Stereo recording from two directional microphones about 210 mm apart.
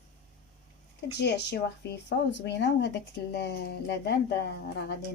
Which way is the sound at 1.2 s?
55° left (ahead or behind).